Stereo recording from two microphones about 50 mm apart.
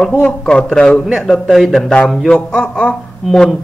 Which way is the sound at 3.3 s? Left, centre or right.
Centre.